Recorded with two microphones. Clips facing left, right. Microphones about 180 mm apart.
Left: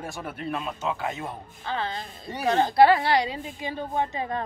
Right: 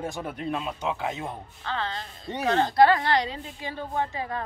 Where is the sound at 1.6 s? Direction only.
15° left (ahead or behind).